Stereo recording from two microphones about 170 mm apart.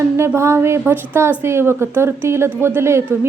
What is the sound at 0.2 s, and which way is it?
A woman's voice, 15° right (ahead or behind).